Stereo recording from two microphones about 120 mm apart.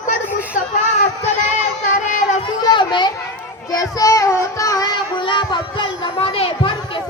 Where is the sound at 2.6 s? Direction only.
40° left (ahead or behind).